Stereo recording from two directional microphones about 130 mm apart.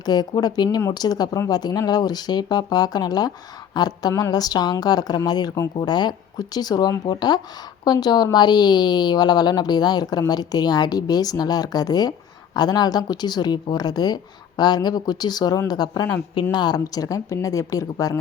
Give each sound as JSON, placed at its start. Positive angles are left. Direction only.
{"t": 0.0, "sound": "speech", "side_deg": 30}